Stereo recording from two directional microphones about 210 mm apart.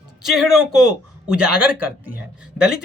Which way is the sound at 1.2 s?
90° right.